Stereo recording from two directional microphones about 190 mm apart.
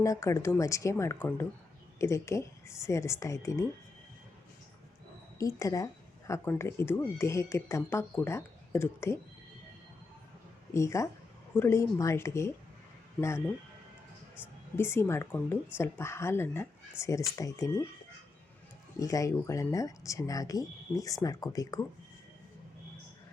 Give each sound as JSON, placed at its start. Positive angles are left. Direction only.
{"t": 0.0, "sound": "speech", "side_deg": 15}
{"t": 5.4, "sound": "speech", "side_deg": 15}
{"t": 10.8, "sound": "speech", "side_deg": 15}
{"t": 14.8, "sound": "speech", "side_deg": 15}
{"t": 18.9, "sound": "speech", "side_deg": 15}